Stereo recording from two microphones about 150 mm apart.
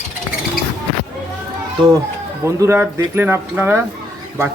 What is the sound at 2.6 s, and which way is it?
Speech, 15° right (ahead or behind).